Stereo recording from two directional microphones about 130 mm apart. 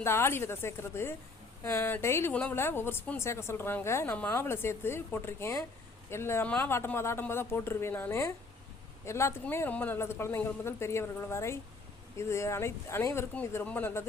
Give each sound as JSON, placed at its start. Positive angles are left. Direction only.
{"t": 0.0, "sound": "speech", "side_deg": 20}